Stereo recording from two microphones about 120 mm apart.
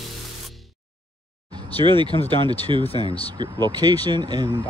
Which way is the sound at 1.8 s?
40° right (ahead or behind).